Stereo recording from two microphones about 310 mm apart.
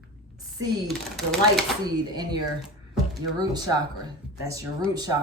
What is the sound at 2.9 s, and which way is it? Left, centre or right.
Speech, centre.